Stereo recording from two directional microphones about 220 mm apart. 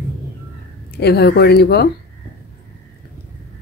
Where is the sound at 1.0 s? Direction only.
45° left (ahead or behind).